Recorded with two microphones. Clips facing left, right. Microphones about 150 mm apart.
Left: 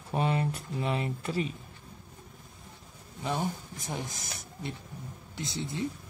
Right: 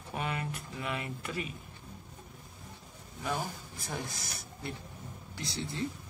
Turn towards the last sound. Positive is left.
turn(degrees=20)  # may be behind; listen again after turning